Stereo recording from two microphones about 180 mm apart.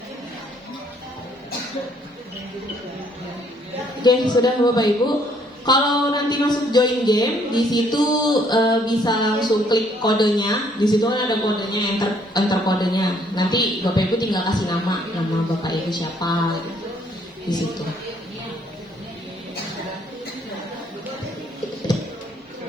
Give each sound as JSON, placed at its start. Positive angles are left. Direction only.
{"t": 4.0, "sound": "a woman's voice", "side_deg": 25}